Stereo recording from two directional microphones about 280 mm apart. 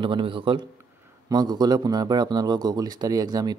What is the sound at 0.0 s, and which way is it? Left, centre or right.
A man's voice, centre.